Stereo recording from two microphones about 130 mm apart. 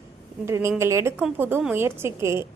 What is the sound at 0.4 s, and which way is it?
A woman's voice, 20° right (ahead or behind).